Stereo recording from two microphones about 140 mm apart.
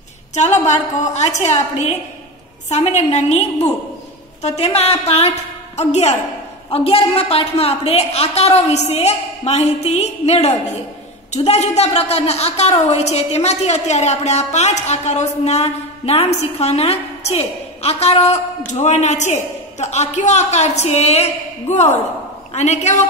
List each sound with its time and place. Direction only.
0.3 s a woman's voice: 55° left (ahead or behind)